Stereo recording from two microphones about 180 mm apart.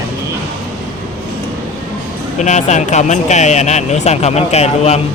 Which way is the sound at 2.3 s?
40° left (ahead or behind).